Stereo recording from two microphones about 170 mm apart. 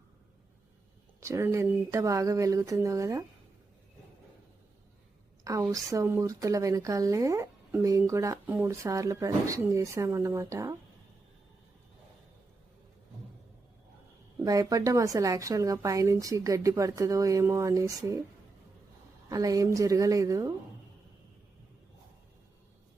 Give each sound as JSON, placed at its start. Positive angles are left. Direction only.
{"t": 1.2, "sound": "a woman's voice", "side_deg": -15}
{"t": 5.5, "sound": "a woman's voice", "side_deg": -20}
{"t": 14.4, "sound": "a woman's voice", "side_deg": -20}
{"t": 19.3, "sound": "a woman's voice", "side_deg": -20}